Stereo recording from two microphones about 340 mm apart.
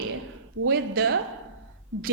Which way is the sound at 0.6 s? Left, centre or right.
Right.